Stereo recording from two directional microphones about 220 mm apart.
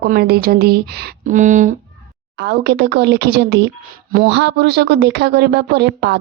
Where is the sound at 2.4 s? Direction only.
50° right (ahead or behind).